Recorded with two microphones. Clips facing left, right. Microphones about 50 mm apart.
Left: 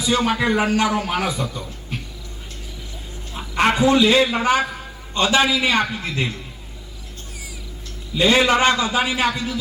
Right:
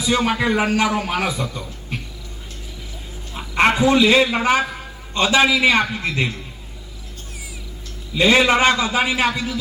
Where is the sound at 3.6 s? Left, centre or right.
Centre.